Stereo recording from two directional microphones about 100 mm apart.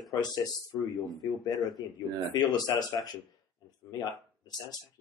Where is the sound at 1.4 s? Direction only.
40° left (ahead or behind).